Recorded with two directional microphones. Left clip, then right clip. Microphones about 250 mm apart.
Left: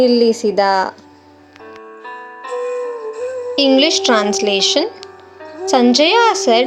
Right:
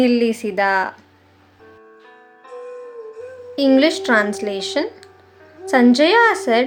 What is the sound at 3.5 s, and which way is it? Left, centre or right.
Speech, centre.